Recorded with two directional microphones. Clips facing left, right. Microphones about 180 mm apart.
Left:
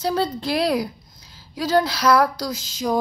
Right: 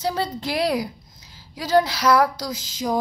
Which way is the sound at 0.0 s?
15° right (ahead or behind).